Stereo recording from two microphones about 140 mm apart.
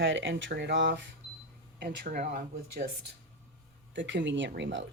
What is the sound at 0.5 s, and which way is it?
Speech, 90° right.